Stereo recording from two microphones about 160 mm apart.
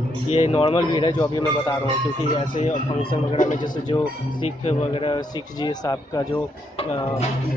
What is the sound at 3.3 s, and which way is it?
Speech, 55° left (ahead or behind).